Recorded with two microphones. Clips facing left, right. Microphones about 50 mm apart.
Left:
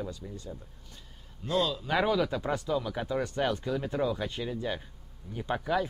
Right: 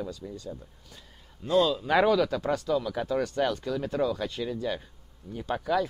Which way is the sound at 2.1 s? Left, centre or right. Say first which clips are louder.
Right 3 dB; centre.